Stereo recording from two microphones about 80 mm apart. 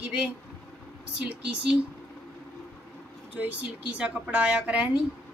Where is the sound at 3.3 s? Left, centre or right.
Centre.